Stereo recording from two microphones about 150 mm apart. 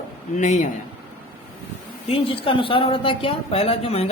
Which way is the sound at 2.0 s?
40° left (ahead or behind).